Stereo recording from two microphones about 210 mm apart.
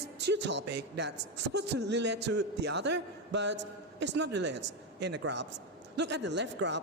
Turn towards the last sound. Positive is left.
turn(degrees=-55)  # may be behind; listen again after turning